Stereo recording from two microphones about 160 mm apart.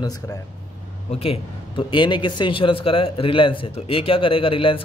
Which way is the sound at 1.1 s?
40° left (ahead or behind).